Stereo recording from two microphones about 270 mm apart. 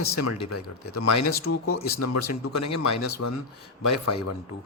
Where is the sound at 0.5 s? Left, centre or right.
Left.